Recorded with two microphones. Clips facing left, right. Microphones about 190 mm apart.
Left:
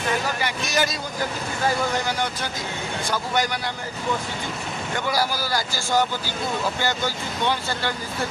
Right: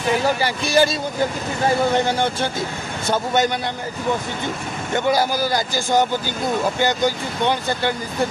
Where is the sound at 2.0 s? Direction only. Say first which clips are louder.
Right 6 dB; 25° right (ahead or behind).